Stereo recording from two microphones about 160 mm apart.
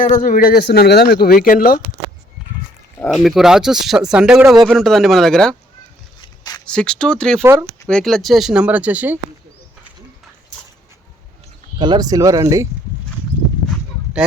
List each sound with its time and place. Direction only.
0.0 s a man's voice: 55° left (ahead or behind)
0.7 s speech: 80° left
1.5 s speech: 60° left (ahead or behind)
3.1 s speech: centre (ahead or behind)
6.2 s a sound: 25° left (ahead or behind)
6.7 s speech: 5° left (ahead or behind)
11.8 s speech: 25° right (ahead or behind)
13.7 s a sound: 5° right (ahead or behind)